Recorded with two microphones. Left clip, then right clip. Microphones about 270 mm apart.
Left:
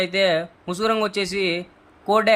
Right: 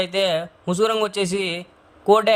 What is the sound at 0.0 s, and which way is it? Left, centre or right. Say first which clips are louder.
A man's voice: left 1 dB; right.